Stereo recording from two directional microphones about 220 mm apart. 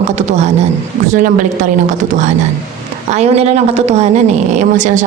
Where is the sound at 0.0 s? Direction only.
30° right (ahead or behind).